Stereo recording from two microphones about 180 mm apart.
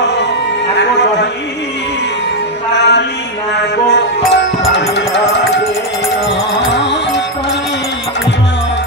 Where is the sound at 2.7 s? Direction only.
70° left (ahead or behind).